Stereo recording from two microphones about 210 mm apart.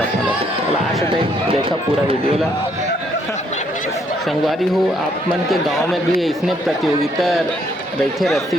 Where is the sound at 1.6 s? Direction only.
25° right (ahead or behind).